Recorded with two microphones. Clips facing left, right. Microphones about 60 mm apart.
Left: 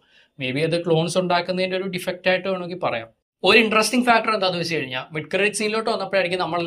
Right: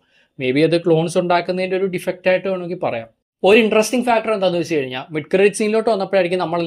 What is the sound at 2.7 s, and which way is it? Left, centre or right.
Speech, centre.